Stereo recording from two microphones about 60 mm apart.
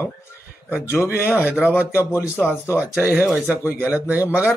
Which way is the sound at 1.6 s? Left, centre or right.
Left.